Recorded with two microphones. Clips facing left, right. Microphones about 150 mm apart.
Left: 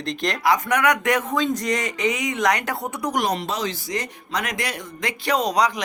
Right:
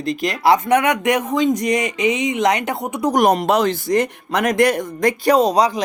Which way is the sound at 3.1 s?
45° right (ahead or behind).